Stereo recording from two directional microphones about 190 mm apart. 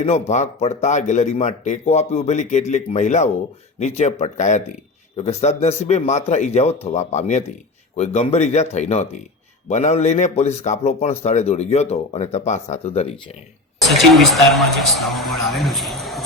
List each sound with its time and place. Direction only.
0.0 s a man's voice: 35° left (ahead or behind)
13.8 s speech: centre (ahead or behind)